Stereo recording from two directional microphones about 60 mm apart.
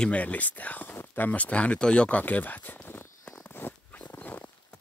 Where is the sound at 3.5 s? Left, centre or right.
Left.